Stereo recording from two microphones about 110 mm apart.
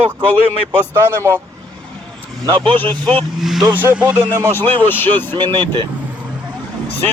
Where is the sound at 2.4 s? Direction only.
40° right (ahead or behind).